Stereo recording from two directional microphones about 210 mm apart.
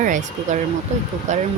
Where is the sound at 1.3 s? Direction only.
35° right (ahead or behind).